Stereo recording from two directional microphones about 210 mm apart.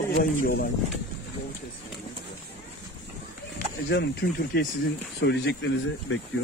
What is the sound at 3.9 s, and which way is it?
Speech, 55° left (ahead or behind).